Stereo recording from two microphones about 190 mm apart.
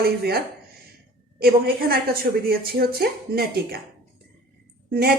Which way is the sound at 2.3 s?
60° right (ahead or behind).